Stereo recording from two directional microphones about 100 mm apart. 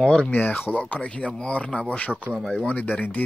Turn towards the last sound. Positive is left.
turn(degrees=15)  # may be behind; listen again after turning